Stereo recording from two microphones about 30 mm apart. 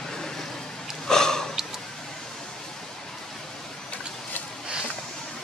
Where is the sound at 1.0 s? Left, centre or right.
Centre.